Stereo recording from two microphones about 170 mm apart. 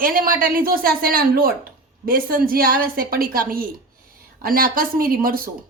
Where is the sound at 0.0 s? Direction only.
55° right (ahead or behind).